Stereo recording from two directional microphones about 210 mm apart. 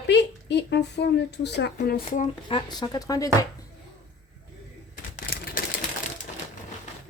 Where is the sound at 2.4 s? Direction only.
20° left (ahead or behind).